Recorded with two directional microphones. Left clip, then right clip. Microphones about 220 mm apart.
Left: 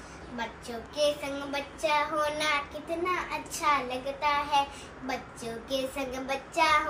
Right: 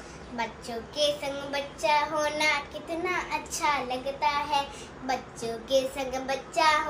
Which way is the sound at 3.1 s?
50° right (ahead or behind).